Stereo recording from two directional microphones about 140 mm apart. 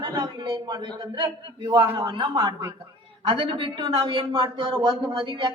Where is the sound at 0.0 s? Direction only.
30° right (ahead or behind).